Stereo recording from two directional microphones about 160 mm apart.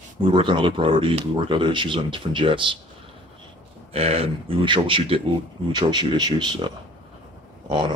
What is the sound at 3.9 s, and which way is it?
Speech, 40° right (ahead or behind).